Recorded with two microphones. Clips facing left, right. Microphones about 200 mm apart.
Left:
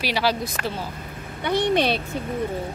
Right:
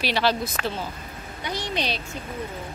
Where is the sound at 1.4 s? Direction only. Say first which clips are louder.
Left 9 dB; 55° left (ahead or behind).